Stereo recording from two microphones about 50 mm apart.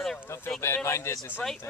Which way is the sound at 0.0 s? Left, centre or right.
Centre.